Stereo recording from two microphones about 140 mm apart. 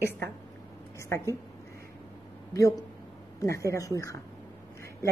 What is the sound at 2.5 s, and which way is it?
A woman's voice, 25° left (ahead or behind).